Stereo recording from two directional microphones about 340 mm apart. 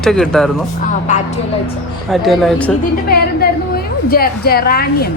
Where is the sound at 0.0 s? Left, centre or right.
Centre.